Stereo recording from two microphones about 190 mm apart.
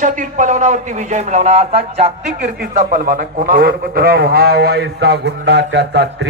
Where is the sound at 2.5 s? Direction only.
45° right (ahead or behind).